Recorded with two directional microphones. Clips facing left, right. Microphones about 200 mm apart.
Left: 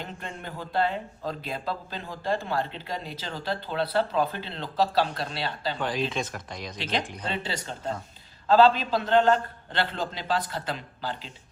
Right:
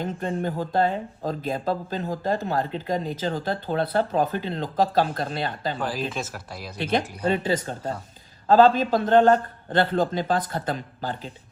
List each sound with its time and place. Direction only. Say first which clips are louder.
0.0 s speech: right 11 dB; 40° right (ahead or behind)
5.8 s speech: left 3 dB; 5° right (ahead or behind)
6.7 s speech: right 6 dB; 55° right (ahead or behind)
8.4 s speech: right 3 dB; 45° right (ahead or behind)